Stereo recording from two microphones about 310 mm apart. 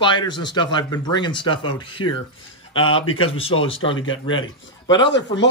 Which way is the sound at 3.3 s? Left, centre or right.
Centre.